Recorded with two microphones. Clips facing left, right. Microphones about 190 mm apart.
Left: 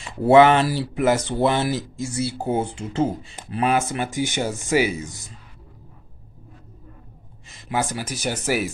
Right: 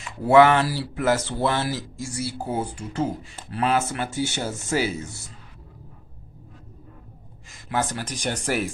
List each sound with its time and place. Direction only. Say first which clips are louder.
0.0 s speech: left 2 dB; 25° left (ahead or behind)
7.7 s speech: left 1 dB; 10° left (ahead or behind)